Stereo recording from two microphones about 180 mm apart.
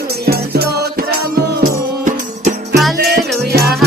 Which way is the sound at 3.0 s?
65° right (ahead or behind).